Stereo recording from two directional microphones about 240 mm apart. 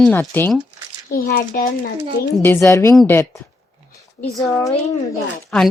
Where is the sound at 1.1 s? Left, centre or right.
Left.